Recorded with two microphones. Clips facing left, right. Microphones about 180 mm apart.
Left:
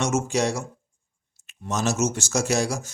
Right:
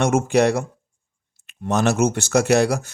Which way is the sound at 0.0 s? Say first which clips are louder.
Right 6 dB; 55° right (ahead or behind).